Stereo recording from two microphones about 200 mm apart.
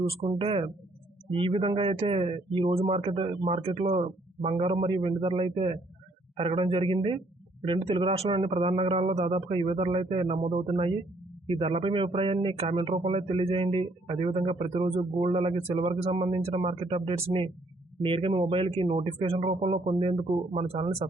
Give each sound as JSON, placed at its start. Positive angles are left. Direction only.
{"t": 0.2, "sound": "speech", "side_deg": -30}